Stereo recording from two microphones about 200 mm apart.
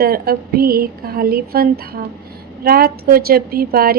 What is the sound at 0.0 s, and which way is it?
A woman's voice, 50° right (ahead or behind).